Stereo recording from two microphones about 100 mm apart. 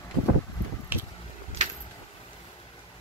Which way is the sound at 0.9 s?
15° right (ahead or behind).